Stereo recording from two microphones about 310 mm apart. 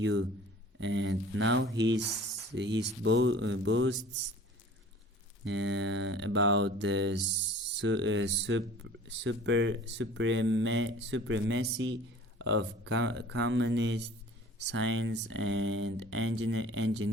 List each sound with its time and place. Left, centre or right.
0.0 s speech: right
5.5 s speech: right
7.3 s a sound: right
7.8 s speech: right